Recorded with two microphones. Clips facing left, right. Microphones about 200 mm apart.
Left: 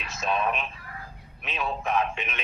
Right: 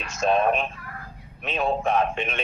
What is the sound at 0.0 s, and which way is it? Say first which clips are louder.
Speech: right 6 dB; 45° right (ahead or behind).